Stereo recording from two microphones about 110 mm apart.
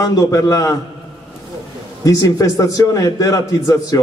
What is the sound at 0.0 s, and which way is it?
Speech, 30° left (ahead or behind).